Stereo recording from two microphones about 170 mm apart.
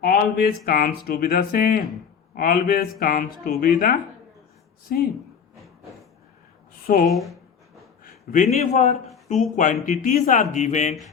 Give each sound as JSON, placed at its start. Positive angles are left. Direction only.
{"t": 0.0, "sound": "speech", "side_deg": 65}
{"t": 6.8, "sound": "speech", "side_deg": 50}
{"t": 7.1, "sound": "speech", "side_deg": 0}
{"t": 8.0, "sound": "a man's voice", "side_deg": 50}